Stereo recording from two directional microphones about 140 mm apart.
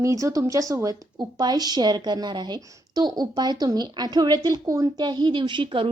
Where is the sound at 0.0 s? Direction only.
20° right (ahead or behind).